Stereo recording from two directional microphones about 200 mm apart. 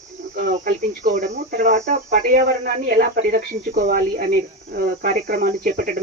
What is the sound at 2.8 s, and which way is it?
Speech, 45° right (ahead or behind).